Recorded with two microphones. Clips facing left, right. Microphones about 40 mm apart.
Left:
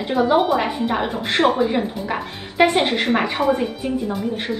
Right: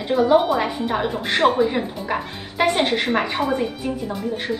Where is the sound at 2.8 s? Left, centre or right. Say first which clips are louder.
Even; left.